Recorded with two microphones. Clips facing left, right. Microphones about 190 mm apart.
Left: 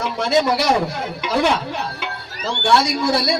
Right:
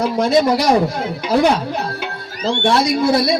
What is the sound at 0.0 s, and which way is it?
A man's voice, 40° right (ahead or behind).